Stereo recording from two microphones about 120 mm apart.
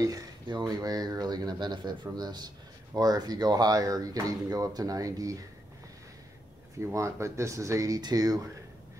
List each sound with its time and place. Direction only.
0.0 s speech: 35° right (ahead or behind)
6.8 s speech: 25° right (ahead or behind)